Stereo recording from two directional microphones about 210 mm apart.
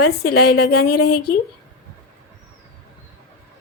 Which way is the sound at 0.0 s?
50° left (ahead or behind).